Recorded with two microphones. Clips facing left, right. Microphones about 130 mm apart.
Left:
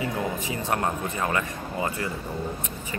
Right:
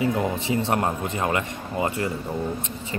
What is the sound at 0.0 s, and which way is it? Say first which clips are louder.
A man's voice: right 5 dB; 25° right (ahead or behind).